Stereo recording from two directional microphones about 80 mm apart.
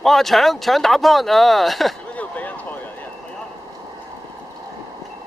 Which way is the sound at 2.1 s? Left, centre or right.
Centre.